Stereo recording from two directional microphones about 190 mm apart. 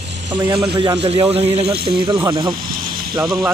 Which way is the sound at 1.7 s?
55° right (ahead or behind).